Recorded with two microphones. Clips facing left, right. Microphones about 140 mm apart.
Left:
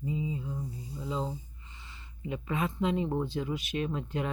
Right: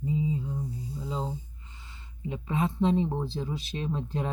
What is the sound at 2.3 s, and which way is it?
Speech, 30° right (ahead or behind).